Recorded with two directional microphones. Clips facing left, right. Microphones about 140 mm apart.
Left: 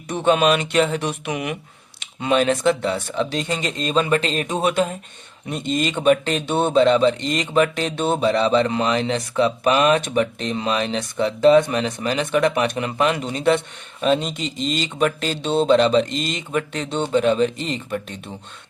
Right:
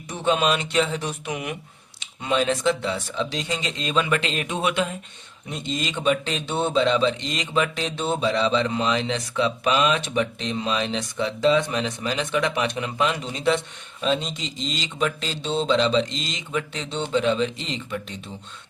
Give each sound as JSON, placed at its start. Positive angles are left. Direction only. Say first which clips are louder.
{"t": 0.1, "sound": "speech", "louder": "left 5 dB", "side_deg": 60}
{"t": 2.0, "sound": "speech", "louder": "left 4 dB", "side_deg": 60}
{"t": 5.5, "sound": "speech", "louder": "left 6 dB", "side_deg": 55}